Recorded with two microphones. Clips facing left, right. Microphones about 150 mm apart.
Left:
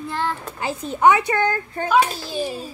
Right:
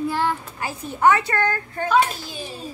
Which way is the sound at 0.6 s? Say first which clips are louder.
Left 4 dB; 20° left (ahead or behind).